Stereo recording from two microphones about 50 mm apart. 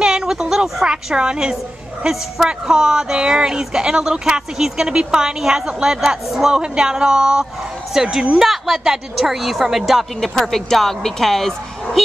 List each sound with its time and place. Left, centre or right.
0.0 s a sound: centre
2.0 s speech: centre
10.2 s a woman's voice: centre